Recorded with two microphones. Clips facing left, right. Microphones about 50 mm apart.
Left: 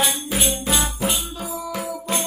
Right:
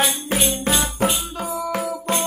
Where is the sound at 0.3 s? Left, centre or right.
Right.